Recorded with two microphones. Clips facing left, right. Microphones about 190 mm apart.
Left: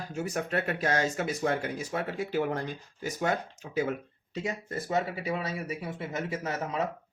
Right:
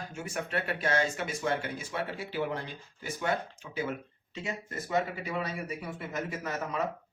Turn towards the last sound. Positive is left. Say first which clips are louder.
# left 2 dB
turn(degrees=25)  # may be behind; listen again after turning